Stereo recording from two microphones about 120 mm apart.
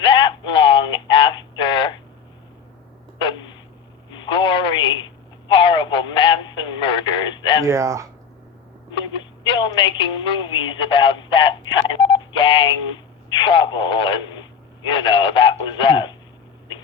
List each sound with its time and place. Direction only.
0.0 s a sound: 45° left (ahead or behind)
4.1 s a sound: 40° left (ahead or behind)
5.5 s radio: 45° left (ahead or behind)
7.6 s speech: 25° right (ahead or behind)
8.9 s telephone: 40° left (ahead or behind)
14.8 s radio: 45° left (ahead or behind)